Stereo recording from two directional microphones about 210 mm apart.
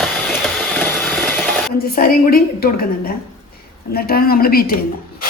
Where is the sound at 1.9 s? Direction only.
45° left (ahead or behind).